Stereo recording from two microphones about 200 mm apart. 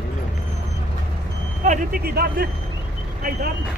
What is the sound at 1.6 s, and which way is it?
Speech, 35° right (ahead or behind).